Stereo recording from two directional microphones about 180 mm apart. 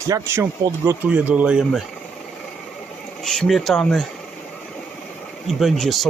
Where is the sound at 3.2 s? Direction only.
5° left (ahead or behind).